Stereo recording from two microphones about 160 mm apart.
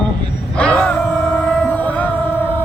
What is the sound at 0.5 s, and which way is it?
Music, 5° left (ahead or behind).